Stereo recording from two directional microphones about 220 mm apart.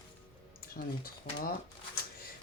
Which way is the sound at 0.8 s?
40° left (ahead or behind).